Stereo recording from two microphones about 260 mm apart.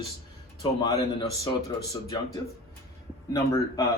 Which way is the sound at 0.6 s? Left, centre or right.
Centre.